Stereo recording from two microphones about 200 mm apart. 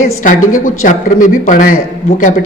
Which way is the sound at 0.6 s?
40° left (ahead or behind).